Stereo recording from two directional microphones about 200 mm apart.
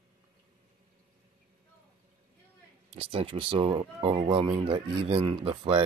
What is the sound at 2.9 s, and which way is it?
Speech, 30° right (ahead or behind).